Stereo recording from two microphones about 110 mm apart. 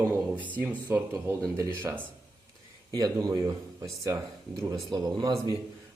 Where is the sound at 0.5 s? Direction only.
15° right (ahead or behind).